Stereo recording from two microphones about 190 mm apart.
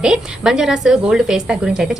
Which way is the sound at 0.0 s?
5° right (ahead or behind).